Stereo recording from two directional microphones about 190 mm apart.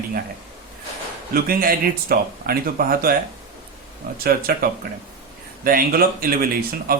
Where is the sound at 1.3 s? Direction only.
50° right (ahead or behind).